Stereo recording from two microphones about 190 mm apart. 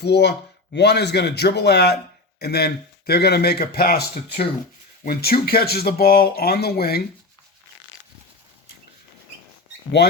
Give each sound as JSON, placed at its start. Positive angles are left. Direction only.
{"t": 0.0, "sound": "speech", "side_deg": 60}